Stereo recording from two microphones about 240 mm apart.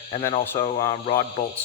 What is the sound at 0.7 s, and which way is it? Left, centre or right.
Speech, left.